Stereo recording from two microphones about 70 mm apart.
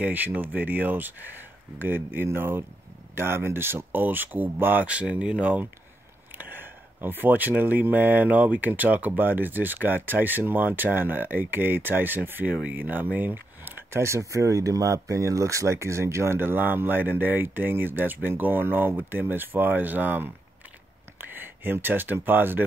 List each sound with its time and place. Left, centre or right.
0.0 s speech: right
4.8 s speech: centre
13.9 s speech: right